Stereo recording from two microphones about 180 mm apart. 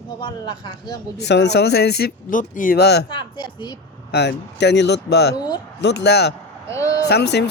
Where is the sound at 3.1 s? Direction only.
25° left (ahead or behind).